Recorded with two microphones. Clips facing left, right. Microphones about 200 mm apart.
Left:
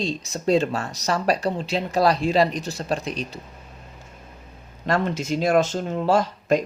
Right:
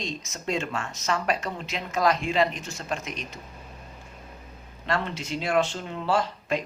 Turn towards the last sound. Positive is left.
turn(degrees=45)  # may be behind; listen again after turning